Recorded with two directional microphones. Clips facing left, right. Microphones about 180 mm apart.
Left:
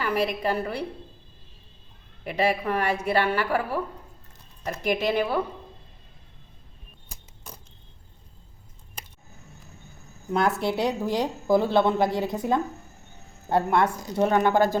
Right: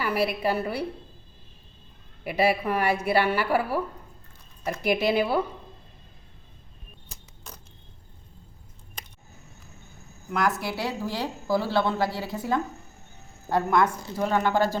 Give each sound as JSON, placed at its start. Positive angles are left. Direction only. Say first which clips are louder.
{"t": 0.0, "sound": "speech", "louder": "even", "side_deg": -10}
{"t": 2.2, "sound": "speech", "louder": "right 1 dB", "side_deg": -10}
{"t": 7.1, "sound": "a sound", "louder": "left 2 dB", "side_deg": 10}
{"t": 10.3, "sound": "a woman's voice", "louder": "left 3 dB", "side_deg": 25}